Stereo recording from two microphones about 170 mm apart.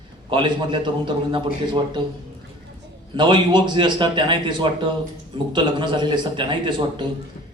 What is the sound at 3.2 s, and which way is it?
A man's voice, 30° right (ahead or behind).